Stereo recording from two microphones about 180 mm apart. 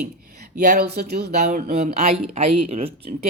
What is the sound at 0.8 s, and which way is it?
Speech, 65° right (ahead or behind).